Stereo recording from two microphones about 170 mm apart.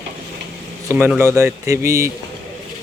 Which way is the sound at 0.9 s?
10° right (ahead or behind).